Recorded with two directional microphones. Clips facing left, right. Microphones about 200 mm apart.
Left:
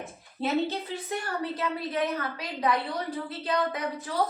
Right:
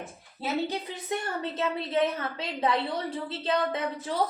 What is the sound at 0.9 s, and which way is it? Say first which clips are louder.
A woman's voice: even; 20° right (ahead or behind).